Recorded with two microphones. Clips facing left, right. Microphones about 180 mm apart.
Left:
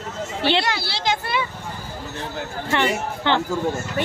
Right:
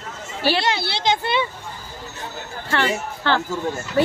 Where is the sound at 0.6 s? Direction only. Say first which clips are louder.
Right 3 dB; 20° right (ahead or behind).